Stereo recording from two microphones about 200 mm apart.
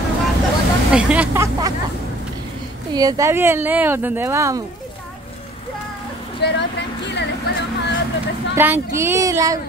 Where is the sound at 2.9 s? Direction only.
20° right (ahead or behind).